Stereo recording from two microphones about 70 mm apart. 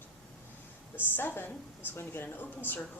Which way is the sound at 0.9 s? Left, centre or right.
Left.